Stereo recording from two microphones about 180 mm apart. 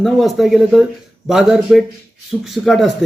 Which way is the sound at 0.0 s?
Centre (ahead or behind).